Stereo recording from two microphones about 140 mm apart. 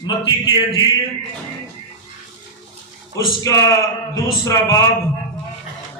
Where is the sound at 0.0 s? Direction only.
30° left (ahead or behind).